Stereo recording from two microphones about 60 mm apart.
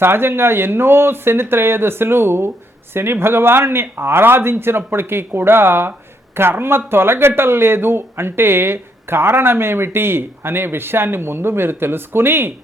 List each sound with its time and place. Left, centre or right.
0.0 s speech: right